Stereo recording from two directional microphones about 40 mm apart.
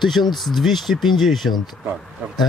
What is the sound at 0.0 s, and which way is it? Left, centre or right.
A man's voice, centre.